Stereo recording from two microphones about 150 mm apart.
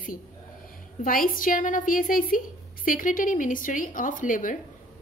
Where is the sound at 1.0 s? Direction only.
70° left (ahead or behind).